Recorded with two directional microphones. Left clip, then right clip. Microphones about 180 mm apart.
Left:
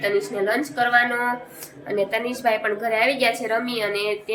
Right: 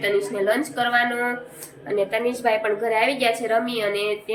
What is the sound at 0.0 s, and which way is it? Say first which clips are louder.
A woman's voice: right 1 dB; 5° left (ahead or behind).